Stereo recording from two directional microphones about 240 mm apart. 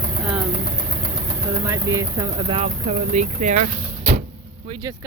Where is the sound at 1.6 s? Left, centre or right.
Centre; by 4.2 s right.